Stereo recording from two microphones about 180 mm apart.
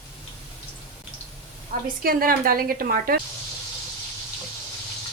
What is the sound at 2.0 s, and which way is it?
Speech, 55° right (ahead or behind).